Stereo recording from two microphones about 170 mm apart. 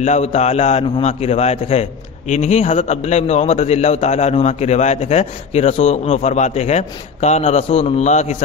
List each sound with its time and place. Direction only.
0.0 s a man's voice: 40° left (ahead or behind)